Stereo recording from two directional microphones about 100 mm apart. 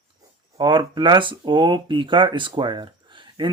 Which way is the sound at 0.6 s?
50° right (ahead or behind).